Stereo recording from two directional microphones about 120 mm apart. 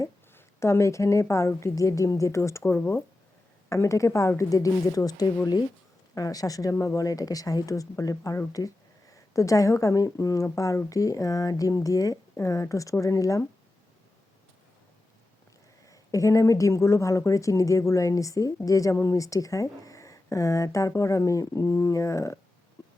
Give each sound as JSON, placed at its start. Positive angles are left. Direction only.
{"t": 0.0, "sound": "speech", "side_deg": 20}
{"t": 15.9, "sound": "speech", "side_deg": 25}